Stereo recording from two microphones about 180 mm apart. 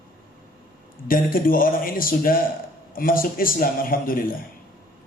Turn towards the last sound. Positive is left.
turn(degrees=50)  # may be behind; listen again after turning